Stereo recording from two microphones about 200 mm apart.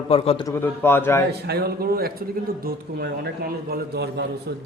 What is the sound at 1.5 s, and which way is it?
Speech, 50° right (ahead or behind).